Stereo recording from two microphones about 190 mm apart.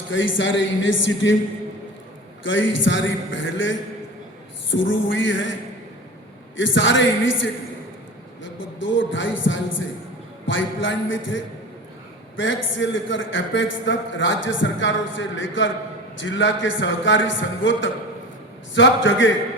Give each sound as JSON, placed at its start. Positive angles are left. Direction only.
{"t": 0.1, "sound": "a man's voice", "side_deg": 75}
{"t": 2.4, "sound": "a man's voice", "side_deg": 80}
{"t": 6.6, "sound": "a man's voice", "side_deg": 75}
{"t": 8.4, "sound": "a man's voice", "side_deg": 75}
{"t": 12.4, "sound": "a man's voice", "side_deg": 75}